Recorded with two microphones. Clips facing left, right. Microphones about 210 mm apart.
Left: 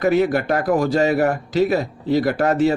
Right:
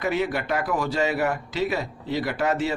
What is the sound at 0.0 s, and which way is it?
A man's voice, 40° left (ahead or behind).